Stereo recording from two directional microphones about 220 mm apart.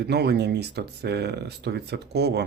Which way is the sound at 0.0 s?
50° right (ahead or behind).